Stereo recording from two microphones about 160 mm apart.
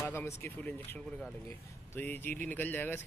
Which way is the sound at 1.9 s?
10° left (ahead or behind).